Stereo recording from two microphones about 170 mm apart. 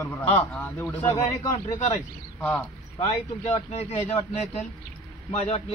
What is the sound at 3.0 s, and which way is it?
A man's voice, 35° left (ahead or behind).